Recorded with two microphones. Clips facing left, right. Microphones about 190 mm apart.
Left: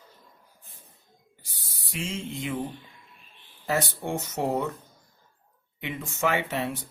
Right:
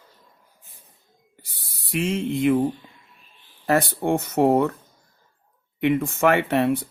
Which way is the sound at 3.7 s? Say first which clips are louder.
Right 7 dB; 60° right (ahead or behind).